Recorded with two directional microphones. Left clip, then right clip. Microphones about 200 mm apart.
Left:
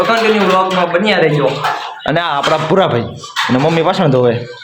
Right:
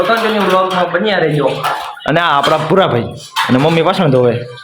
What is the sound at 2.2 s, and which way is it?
Speech, 20° right (ahead or behind).